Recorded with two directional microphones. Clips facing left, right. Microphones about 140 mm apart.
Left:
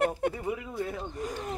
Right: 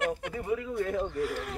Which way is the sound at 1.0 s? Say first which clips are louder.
Right 3 dB; 20° left (ahead or behind).